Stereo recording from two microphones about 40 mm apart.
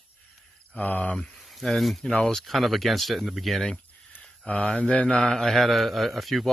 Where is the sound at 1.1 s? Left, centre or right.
Centre.